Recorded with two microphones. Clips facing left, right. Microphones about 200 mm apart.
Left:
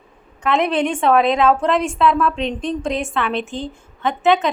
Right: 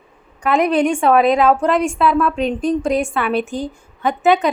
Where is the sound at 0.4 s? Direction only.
5° right (ahead or behind).